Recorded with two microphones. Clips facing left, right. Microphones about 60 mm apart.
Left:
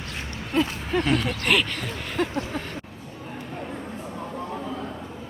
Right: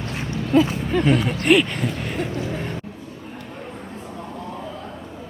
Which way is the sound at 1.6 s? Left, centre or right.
Centre.